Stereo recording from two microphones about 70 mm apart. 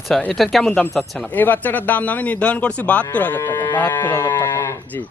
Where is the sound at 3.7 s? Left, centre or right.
Left.